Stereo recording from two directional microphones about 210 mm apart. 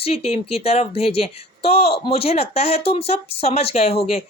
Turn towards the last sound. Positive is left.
turn(degrees=30)  # may be behind; listen again after turning